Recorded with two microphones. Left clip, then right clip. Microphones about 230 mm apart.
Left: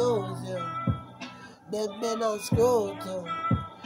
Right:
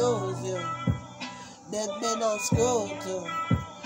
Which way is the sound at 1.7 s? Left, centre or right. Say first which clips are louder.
Even; centre.